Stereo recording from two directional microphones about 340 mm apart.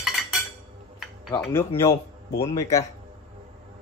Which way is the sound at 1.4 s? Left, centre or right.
Centre.